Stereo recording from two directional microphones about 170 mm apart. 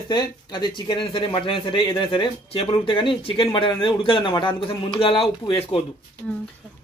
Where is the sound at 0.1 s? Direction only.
25° left (ahead or behind).